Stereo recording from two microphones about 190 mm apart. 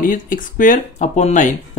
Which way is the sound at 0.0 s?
45° left (ahead or behind).